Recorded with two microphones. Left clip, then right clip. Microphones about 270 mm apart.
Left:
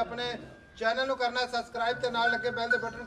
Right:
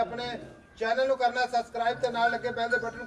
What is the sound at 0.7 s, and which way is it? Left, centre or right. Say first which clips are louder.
A man's voice: right 2 dB; centre.